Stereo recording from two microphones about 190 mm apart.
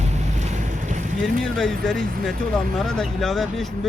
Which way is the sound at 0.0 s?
35° right (ahead or behind).